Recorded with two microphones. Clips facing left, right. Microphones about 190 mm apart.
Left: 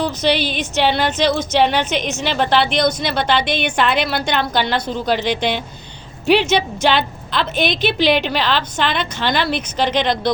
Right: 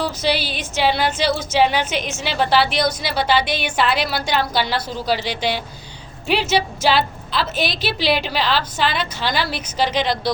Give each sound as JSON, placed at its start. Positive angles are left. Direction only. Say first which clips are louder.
{"t": 0.2, "sound": "a woman's voice", "louder": "left 4 dB", "side_deg": -5}
{"t": 3.9, "sound": "speech", "louder": "left 3 dB", "side_deg": 60}
{"t": 4.3, "sound": "a woman's voice", "louder": "left 1 dB", "side_deg": -5}
{"t": 5.3, "sound": "speech", "louder": "left 3 dB", "side_deg": 55}
{"t": 6.2, "sound": "a woman's voice", "louder": "left 4 dB", "side_deg": -5}